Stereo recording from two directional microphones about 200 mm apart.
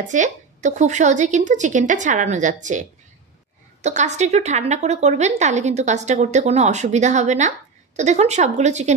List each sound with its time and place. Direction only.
0.1 s a woman's voice: 35° right (ahead or behind)